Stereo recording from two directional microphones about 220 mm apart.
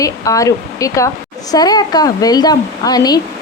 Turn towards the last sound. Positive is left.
turn(degrees=15)  # may be behind; listen again after turning